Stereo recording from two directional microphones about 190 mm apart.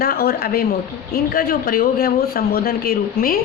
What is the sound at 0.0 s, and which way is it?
Speech, 50° left (ahead or behind).